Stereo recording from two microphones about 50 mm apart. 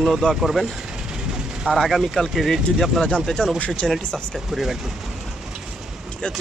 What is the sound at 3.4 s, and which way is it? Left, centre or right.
Speech, centre.